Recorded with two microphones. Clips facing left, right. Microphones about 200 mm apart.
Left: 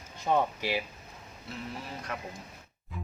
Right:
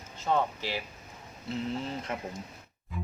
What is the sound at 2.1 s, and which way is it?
Speech, 25° right (ahead or behind).